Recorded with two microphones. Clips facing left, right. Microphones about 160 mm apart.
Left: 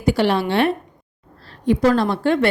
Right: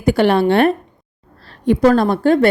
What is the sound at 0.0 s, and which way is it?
A woman's voice, 55° right (ahead or behind).